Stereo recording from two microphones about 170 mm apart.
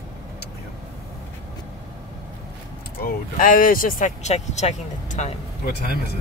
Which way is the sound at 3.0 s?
55° left (ahead or behind).